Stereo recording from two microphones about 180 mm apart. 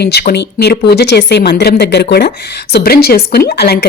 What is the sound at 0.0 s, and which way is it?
A woman's voice, 60° left (ahead or behind).